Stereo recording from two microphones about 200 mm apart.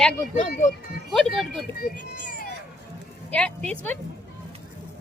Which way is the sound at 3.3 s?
5° left (ahead or behind).